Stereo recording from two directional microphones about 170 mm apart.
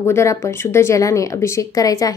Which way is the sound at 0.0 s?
15° left (ahead or behind).